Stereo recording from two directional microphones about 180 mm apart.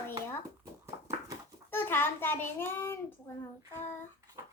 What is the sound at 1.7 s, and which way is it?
A child's voice, 10° left (ahead or behind).